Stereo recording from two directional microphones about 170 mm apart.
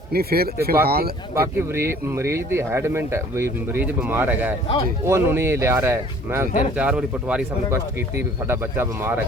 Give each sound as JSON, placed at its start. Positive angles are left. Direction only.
{"t": 0.1, "sound": "speech", "side_deg": -65}
{"t": 1.4, "sound": "speech", "side_deg": -15}